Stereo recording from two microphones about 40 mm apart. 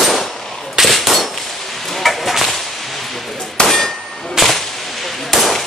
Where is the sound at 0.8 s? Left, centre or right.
Centre.